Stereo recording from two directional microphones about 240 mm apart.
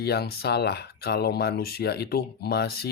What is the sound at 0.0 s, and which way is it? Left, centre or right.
Speech, left.